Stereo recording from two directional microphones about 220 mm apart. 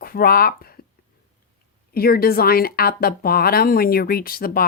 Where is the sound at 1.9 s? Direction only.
45° left (ahead or behind).